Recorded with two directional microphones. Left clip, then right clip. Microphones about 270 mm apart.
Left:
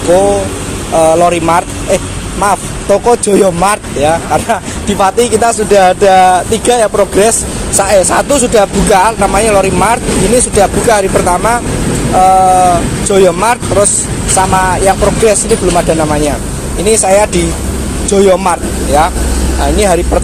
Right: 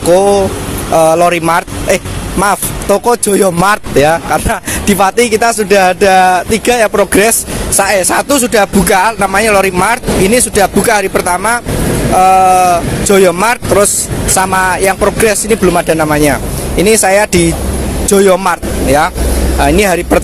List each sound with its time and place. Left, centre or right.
0.9 s speech: right